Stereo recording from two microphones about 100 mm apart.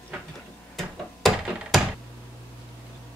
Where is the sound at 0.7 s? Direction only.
Centre (ahead or behind).